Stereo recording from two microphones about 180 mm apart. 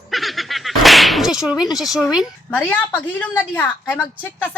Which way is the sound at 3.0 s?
10° left (ahead or behind).